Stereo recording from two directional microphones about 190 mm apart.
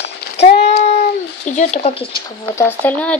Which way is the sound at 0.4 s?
35° left (ahead or behind).